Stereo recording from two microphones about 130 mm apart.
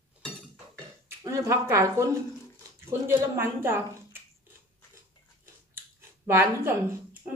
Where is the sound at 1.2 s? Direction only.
25° right (ahead or behind).